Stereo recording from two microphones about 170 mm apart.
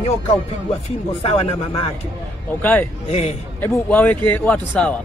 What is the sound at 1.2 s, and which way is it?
Speech, 35° left (ahead or behind).